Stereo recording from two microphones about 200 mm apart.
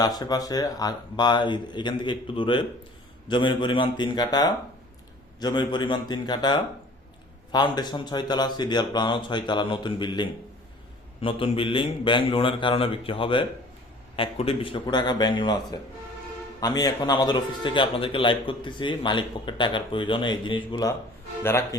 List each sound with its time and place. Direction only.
0.0 s a man's voice: 20° left (ahead or behind)
16.6 s a man's voice: 20° left (ahead or behind)
21.4 s speech: 10° left (ahead or behind)